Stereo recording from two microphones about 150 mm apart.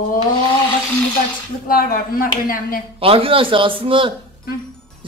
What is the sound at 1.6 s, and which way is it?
Speech, 75° left (ahead or behind).